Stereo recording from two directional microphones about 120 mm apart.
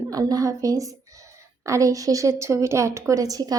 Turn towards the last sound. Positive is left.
turn(degrees=-30)  # may be behind; listen again after turning